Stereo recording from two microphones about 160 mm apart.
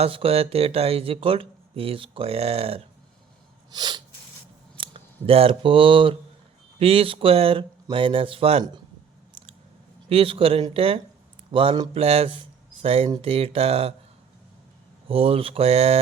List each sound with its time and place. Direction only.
0.0 s speech: 35° right (ahead or behind)
3.7 s sneeze: 25° right (ahead or behind)
4.8 s speech: 35° right (ahead or behind)
10.1 s speech: 35° right (ahead or behind)
15.0 s speech: 35° right (ahead or behind)